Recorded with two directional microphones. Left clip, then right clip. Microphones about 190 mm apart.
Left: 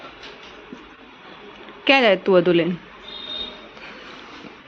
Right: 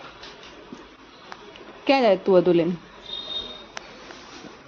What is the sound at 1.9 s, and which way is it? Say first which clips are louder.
Speech: left 3 dB; centre (ahead or behind).